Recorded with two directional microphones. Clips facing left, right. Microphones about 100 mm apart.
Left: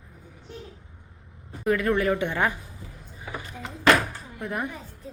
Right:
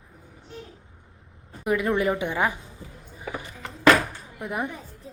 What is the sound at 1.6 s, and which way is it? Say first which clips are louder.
Speech: even; 15° right (ahead or behind).